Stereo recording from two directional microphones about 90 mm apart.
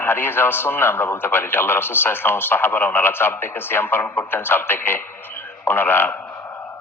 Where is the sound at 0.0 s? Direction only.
25° left (ahead or behind).